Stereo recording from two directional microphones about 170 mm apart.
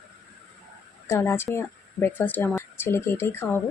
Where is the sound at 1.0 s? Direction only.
15° left (ahead or behind).